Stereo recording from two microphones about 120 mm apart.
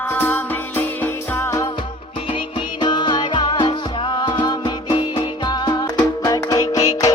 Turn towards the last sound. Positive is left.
turn(degrees=30)  # may be behind; listen again after turning